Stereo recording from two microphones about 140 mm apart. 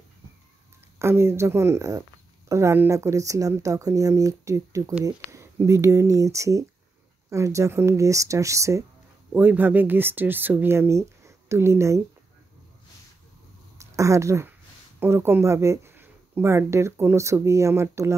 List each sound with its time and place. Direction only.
0.9 s speech: 20° right (ahead or behind)
13.7 s speech: 20° right (ahead or behind)